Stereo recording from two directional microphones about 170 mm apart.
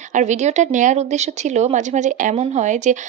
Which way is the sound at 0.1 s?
45° right (ahead or behind).